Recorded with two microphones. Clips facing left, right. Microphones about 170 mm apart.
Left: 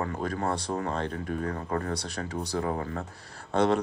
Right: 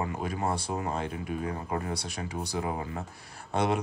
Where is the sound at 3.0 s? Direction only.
15° right (ahead or behind).